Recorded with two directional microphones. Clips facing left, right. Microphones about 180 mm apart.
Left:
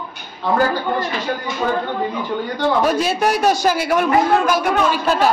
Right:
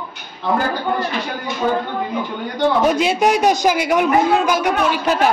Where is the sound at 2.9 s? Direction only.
20° right (ahead or behind).